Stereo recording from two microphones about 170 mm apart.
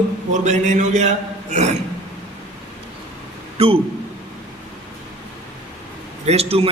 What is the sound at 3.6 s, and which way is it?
Speech, 35° right (ahead or behind).